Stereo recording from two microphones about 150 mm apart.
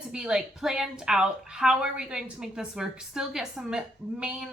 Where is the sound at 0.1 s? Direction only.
5° right (ahead or behind).